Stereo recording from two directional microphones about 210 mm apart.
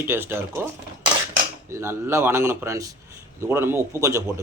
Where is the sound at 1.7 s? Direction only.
10° right (ahead or behind).